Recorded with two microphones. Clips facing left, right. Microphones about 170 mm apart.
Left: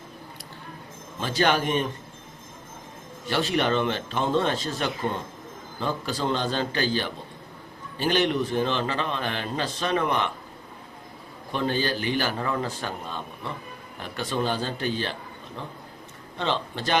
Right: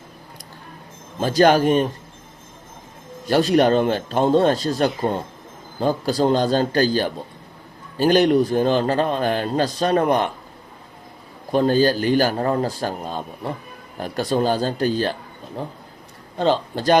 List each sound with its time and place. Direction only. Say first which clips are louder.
1.2 s speech: right 8 dB; 40° right (ahead or behind)
3.2 s speech: right 8 dB; 40° right (ahead or behind)
11.5 s speech: right 9 dB; 40° right (ahead or behind)
16.4 s speech: right 8 dB; 40° right (ahead or behind)